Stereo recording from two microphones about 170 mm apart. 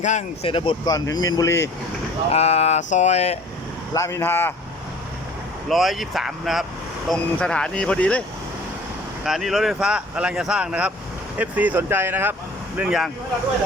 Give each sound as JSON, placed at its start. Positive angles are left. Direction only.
{"t": 0.0, "sound": "speech", "side_deg": 45}
{"t": 0.5, "sound": "speech", "side_deg": 30}
{"t": 2.3, "sound": "speech", "side_deg": 40}
{"t": 3.9, "sound": "speech", "side_deg": 15}
{"t": 5.6, "sound": "speech", "side_deg": 0}
{"t": 9.2, "sound": "speech", "side_deg": 0}